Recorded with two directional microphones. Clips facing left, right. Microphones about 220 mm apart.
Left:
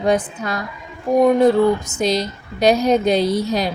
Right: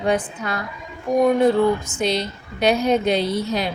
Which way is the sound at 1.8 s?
40° left (ahead or behind).